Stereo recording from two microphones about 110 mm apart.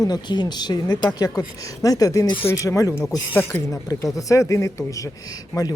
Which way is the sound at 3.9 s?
30° left (ahead or behind).